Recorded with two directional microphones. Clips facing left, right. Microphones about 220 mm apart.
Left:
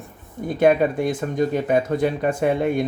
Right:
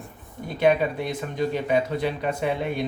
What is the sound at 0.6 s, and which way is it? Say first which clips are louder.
Speech: left 4 dB; 50° left (ahead or behind).